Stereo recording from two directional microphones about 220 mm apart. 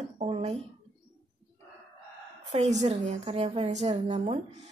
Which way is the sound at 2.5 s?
30° right (ahead or behind).